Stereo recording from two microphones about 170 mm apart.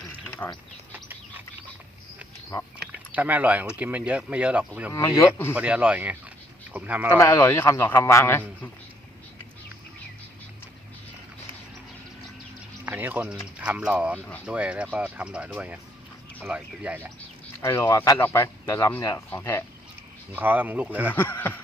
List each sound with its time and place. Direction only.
0.3 s a sound: 10° left (ahead or behind)
2.8 s a sound: 10° right (ahead or behind)
3.8 s speech: 10° right (ahead or behind)
4.9 s speech: 20° left (ahead or behind)
5.5 s speech: 5° right (ahead or behind)
7.1 s speech: 15° left (ahead or behind)
12.8 s speech: 10° right (ahead or behind)
17.6 s speech: 15° left (ahead or behind)
20.3 s speech: 10° right (ahead or behind)
21.1 s speech: 10° left (ahead or behind)